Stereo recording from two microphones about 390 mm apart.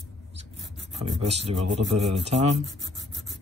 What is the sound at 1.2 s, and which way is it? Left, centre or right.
Speech, centre.